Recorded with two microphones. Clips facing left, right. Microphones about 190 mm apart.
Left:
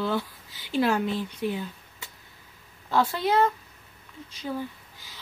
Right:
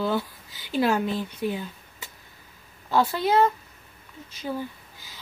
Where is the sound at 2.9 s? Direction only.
Centre (ahead or behind).